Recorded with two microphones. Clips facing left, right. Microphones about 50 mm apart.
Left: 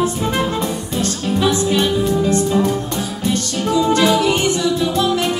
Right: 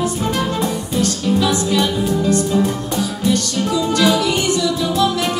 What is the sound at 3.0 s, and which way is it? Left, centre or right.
Music, left.